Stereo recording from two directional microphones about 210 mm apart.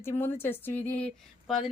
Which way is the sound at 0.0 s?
10° left (ahead or behind).